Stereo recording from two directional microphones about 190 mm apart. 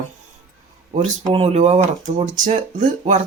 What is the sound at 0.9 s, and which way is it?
Speech, 30° right (ahead or behind).